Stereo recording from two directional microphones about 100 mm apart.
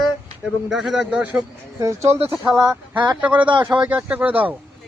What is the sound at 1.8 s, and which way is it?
Speech, 30° right (ahead or behind).